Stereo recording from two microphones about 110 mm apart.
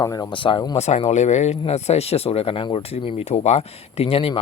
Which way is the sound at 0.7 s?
85° left.